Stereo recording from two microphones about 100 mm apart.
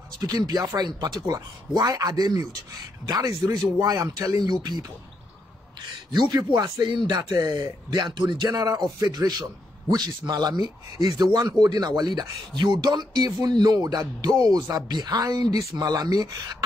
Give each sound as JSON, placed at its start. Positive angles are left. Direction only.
{"t": 0.2, "sound": "speech", "side_deg": -40}
{"t": 6.1, "sound": "a man's voice", "side_deg": -45}